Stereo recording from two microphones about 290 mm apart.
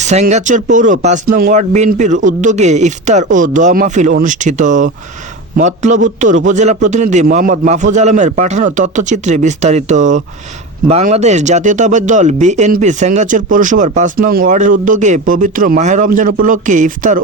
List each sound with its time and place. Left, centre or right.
0.0 s speech: right